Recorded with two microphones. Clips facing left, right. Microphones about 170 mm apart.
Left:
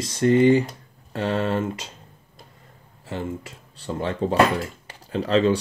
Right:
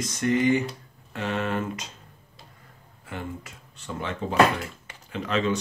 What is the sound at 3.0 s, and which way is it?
Speech, 30° left (ahead or behind).